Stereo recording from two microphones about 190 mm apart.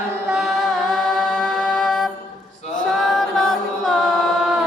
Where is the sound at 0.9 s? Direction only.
Centre (ahead or behind).